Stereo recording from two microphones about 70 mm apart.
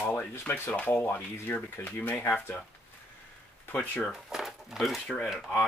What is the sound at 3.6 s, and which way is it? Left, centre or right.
Speech, left.